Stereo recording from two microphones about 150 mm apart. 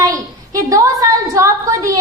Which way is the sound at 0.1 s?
20° right (ahead or behind).